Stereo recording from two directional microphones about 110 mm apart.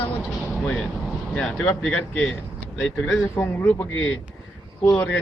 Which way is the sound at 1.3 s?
5° left (ahead or behind).